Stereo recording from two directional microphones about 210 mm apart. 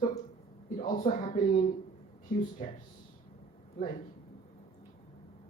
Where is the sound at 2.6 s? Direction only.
35° left (ahead or behind).